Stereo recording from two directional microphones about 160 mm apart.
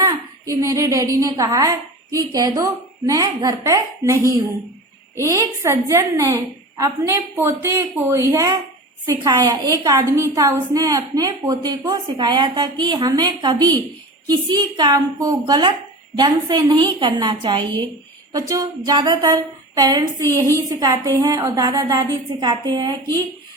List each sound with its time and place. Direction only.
0.0 s a woman's voice: 20° right (ahead or behind)